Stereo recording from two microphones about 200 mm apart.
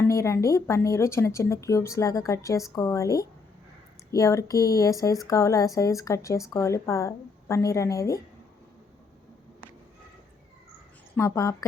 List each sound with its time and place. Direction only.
0.1 s a woman's voice: 15° left (ahead or behind)
11.2 s a woman's voice: 15° left (ahead or behind)